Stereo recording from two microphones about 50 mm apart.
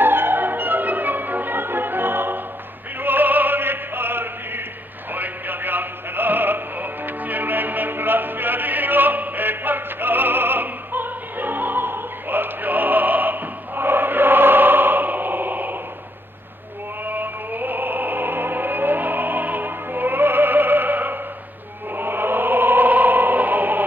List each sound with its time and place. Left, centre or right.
0.0 s music: right
3.0 s opera: right
5.1 s music: right
17.0 s music: right
21.9 s choir: right